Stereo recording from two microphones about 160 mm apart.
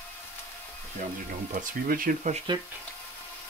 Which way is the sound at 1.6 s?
60° right (ahead or behind).